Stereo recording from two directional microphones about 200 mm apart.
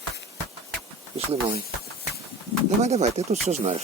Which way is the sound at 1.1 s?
30° right (ahead or behind).